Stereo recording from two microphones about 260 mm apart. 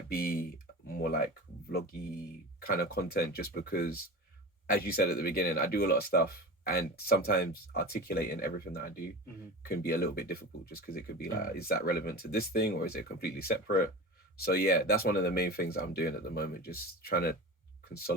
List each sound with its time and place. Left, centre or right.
0.1 s typing: left
2.6 s speech: left